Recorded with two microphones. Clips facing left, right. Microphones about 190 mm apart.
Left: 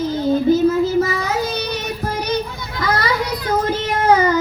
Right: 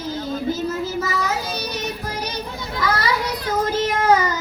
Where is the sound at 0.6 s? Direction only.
55° left (ahead or behind).